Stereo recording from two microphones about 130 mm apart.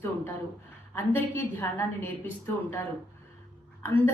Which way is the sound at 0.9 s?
20° left (ahead or behind).